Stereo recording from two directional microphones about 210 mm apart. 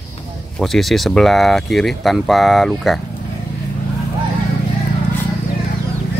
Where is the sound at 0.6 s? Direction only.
Centre (ahead or behind).